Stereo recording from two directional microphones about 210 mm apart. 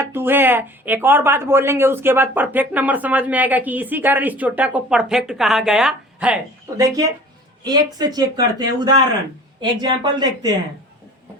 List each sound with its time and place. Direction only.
0.0 s speech: 10° right (ahead or behind)
7.6 s speech: 20° right (ahead or behind)